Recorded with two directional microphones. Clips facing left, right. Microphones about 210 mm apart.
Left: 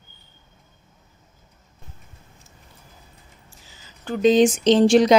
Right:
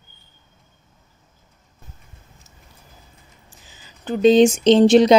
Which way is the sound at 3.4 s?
20° right (ahead or behind).